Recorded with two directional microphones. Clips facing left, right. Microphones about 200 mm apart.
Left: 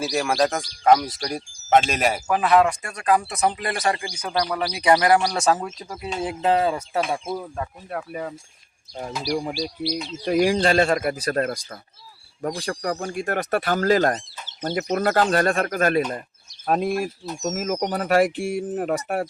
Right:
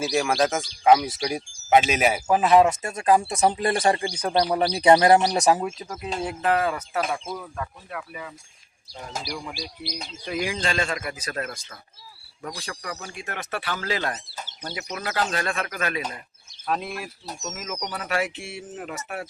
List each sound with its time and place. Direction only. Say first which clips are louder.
0.0 s speech: left 1 dB; centre (ahead or behind)
2.2 s speech: right 1 dB; 20° right (ahead or behind)
5.8 s speech: even; centre (ahead or behind)
6.2 s speech: left 3 dB; 25° left (ahead or behind); by 19.3 s 40° left (ahead or behind)